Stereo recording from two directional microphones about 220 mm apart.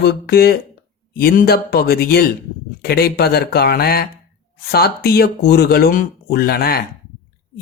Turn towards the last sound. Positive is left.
turn(degrees=45)  # may be behind; listen again after turning